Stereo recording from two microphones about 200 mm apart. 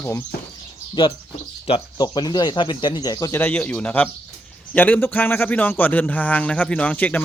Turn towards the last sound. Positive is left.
turn(degrees=5)  # may be behind; listen again after turning